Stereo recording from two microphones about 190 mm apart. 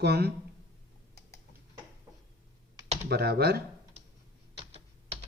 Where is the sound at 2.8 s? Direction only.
35° right (ahead or behind).